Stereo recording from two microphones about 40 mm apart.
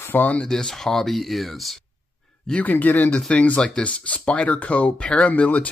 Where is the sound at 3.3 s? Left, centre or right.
Left.